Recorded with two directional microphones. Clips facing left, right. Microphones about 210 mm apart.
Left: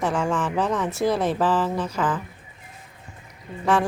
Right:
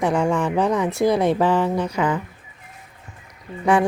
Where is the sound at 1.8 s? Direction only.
10° right (ahead or behind).